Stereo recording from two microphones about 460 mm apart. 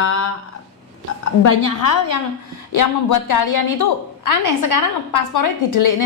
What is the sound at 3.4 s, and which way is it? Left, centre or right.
A woman's voice, left.